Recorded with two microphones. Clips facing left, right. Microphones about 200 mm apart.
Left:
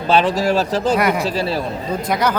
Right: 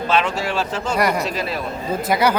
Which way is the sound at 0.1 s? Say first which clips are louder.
Left 6 dB; 35° left (ahead or behind).